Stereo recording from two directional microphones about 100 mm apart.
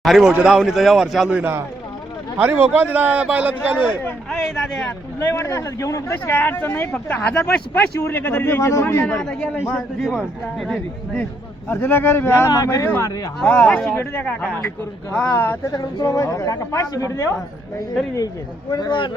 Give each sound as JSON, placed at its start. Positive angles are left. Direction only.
{"t": 0.0, "sound": "speech", "side_deg": -5}
{"t": 2.4, "sound": "a man's voice", "side_deg": -15}
{"t": 4.3, "sound": "speech", "side_deg": 0}
{"t": 5.3, "sound": "speech", "side_deg": 30}
{"t": 6.3, "sound": "speech", "side_deg": 20}
{"t": 9.0, "sound": "speech", "side_deg": 10}
{"t": 11.7, "sound": "speech", "side_deg": 20}
{"t": 12.5, "sound": "speech", "side_deg": 35}
{"t": 12.8, "sound": "speech", "side_deg": 25}
{"t": 13.4, "sound": "speech", "side_deg": 10}
{"t": 15.4, "sound": "speech", "side_deg": 25}
{"t": 15.7, "sound": "speech", "side_deg": 35}
{"t": 18.7, "sound": "speech", "side_deg": 45}